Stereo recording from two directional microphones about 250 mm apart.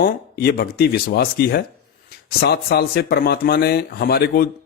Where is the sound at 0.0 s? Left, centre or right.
Left.